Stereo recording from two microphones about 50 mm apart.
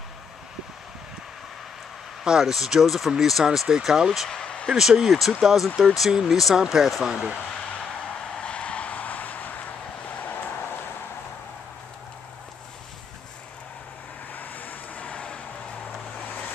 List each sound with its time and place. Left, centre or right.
2.2 s speech: centre
4.3 s a sound: centre
4.6 s speech: centre
8.4 s vehicle: left
14.3 s vehicle: left